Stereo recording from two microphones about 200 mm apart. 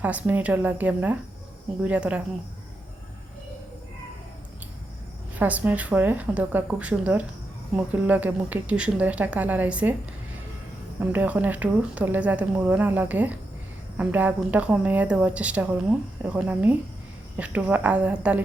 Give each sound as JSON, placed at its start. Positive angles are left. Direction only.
{"t": 0.0, "sound": "a woman's voice", "side_deg": -10}
{"t": 5.4, "sound": "a woman's voice", "side_deg": -10}
{"t": 11.0, "sound": "a woman's voice", "side_deg": -10}